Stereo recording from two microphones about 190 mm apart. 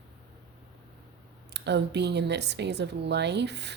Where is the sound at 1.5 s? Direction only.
65° right (ahead or behind).